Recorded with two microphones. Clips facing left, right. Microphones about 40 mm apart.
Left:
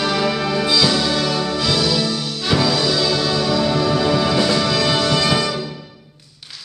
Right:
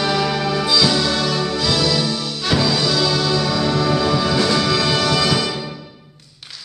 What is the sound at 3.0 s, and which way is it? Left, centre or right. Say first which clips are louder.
Music: even; centre.